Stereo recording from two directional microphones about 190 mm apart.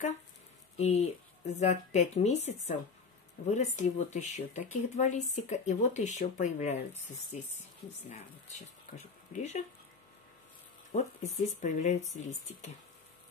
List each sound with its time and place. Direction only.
0.7 s speech: 35° left (ahead or behind)
8.9 s speech: 35° left (ahead or behind)
10.9 s speech: 35° left (ahead or behind)